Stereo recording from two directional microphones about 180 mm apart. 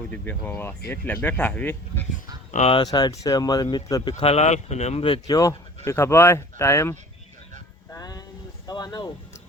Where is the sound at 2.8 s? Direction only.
20° left (ahead or behind).